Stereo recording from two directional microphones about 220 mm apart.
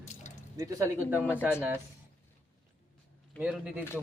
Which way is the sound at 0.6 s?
15° right (ahead or behind).